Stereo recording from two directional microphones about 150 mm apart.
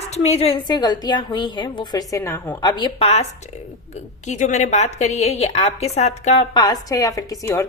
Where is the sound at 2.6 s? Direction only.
30° left (ahead or behind).